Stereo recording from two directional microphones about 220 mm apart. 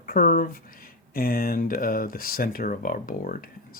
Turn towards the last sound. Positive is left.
turn(degrees=40)  # may be behind; listen again after turning